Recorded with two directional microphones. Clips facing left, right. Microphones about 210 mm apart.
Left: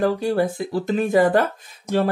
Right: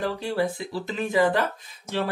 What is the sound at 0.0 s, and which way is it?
Speech, 45° left (ahead or behind).